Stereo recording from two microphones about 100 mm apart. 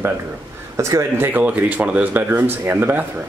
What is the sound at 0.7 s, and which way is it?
A man's voice, 30° right (ahead or behind).